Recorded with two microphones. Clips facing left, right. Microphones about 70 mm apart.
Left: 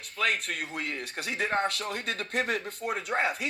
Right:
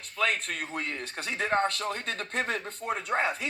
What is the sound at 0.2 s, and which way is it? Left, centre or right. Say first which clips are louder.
Speech: even; right.